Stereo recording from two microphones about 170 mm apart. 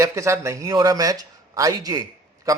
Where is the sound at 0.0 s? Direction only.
15° right (ahead or behind).